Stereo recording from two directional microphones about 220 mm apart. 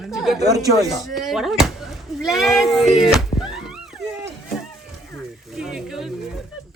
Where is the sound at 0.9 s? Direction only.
Centre (ahead or behind).